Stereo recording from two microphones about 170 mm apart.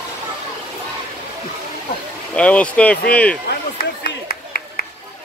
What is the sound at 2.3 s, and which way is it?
Speech, 5° left (ahead or behind).